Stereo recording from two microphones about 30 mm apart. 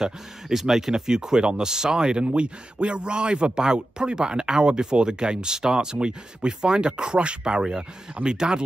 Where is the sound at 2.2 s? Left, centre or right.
Right.